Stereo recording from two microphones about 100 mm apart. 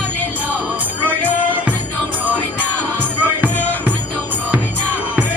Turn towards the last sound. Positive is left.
turn(degrees=-15)  # may be behind; listen again after turning